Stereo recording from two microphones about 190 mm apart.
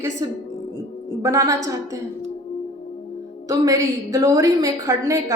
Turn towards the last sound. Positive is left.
turn(degrees=-15)  # may be behind; listen again after turning